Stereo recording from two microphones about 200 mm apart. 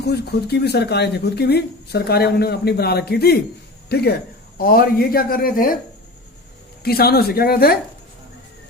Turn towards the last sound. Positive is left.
turn(degrees=50)  # may be behind; listen again after turning